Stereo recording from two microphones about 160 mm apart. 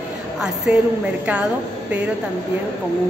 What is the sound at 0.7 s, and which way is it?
Speech, 5° right (ahead or behind).